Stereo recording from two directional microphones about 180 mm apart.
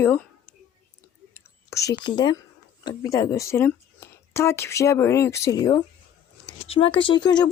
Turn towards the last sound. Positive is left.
turn(degrees=25)  # may be behind; listen again after turning